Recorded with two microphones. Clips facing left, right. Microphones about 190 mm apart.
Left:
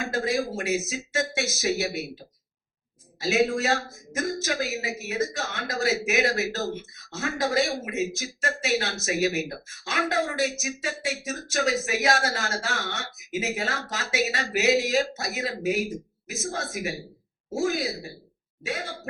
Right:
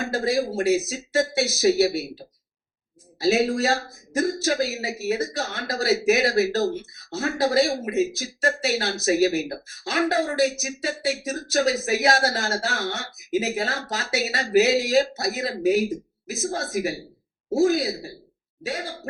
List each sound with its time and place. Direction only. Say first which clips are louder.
0.1 s a man's voice: right 3 dB; 35° right (ahead or behind)